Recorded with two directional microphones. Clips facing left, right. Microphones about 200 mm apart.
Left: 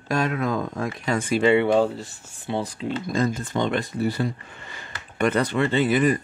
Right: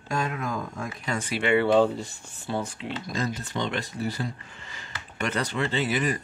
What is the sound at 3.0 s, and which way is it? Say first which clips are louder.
Speech: left 6 dB; 50° left (ahead or behind).